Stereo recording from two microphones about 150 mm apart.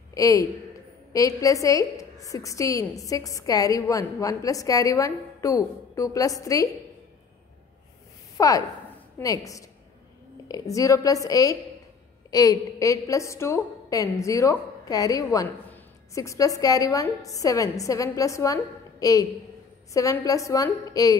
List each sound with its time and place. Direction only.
0.1 s a man's voice: 20° left (ahead or behind)
8.4 s a woman's voice: 20° left (ahead or behind)